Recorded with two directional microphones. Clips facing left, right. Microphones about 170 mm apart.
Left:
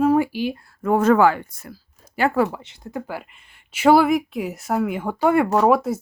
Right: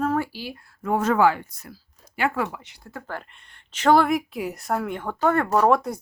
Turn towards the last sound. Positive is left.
turn(degrees=5)  # may be behind; listen again after turning